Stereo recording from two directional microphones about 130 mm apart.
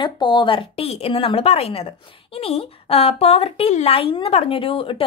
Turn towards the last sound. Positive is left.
turn(degrees=45)  # may be behind; listen again after turning